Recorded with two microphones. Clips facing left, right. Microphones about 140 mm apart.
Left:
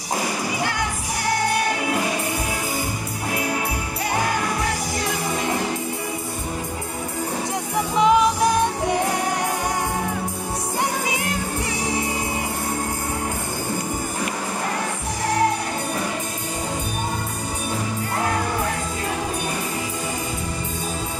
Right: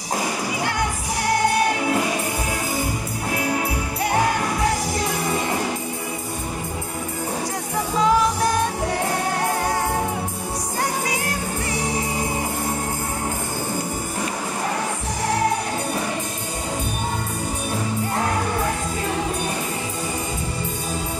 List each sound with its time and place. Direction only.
8.0 s music: 20° left (ahead or behind)